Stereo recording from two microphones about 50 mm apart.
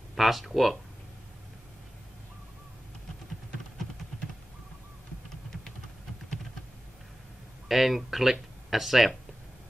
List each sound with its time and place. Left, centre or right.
0.1 s speech: centre
7.6 s speech: centre